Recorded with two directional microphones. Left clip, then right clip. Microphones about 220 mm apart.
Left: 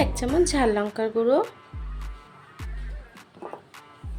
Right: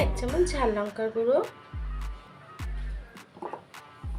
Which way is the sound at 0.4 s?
50° left (ahead or behind).